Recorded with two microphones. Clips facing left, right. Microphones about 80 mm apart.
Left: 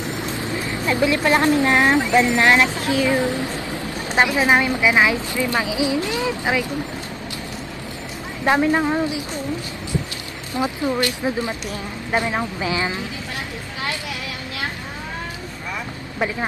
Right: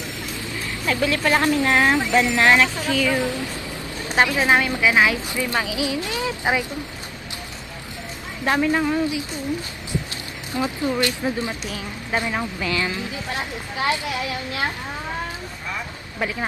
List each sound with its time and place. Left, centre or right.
0.2 s a woman's voice: left
6.4 s speech: right
8.5 s a woman's voice: left
10.5 s a woman's voice: centre